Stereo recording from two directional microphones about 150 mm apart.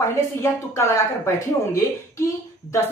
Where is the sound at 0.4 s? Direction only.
20° left (ahead or behind).